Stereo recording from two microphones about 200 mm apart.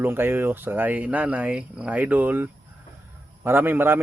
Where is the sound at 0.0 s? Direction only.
10° right (ahead or behind).